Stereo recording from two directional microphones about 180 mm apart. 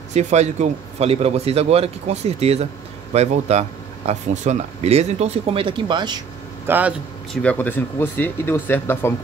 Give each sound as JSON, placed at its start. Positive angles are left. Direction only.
{"t": 0.1, "sound": "a man's voice", "side_deg": -40}
{"t": 6.7, "sound": "speech", "side_deg": -10}
{"t": 7.4, "sound": "speech", "side_deg": 10}